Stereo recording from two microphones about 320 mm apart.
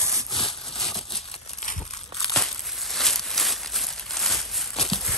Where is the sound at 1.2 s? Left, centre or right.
Centre.